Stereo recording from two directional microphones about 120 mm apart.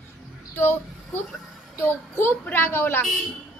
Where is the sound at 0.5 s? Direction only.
20° left (ahead or behind).